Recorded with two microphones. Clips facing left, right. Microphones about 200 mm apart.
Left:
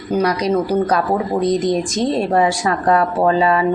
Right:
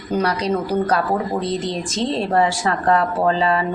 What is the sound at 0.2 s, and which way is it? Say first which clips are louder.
Speech: left 4 dB; 15° left (ahead or behind).